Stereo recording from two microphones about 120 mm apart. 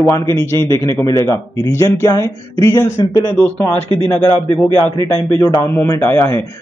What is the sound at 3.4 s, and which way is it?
Speech, 15° left (ahead or behind).